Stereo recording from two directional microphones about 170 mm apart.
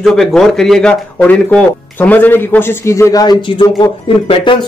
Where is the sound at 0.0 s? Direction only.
Centre (ahead or behind).